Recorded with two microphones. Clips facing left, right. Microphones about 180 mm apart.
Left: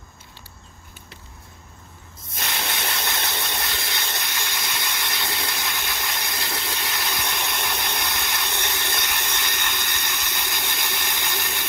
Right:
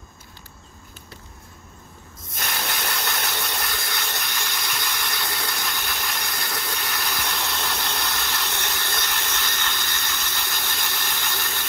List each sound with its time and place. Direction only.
2.3 s steam: 25° left (ahead or behind)